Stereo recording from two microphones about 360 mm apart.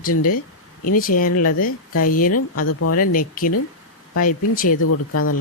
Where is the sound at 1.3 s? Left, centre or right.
Left.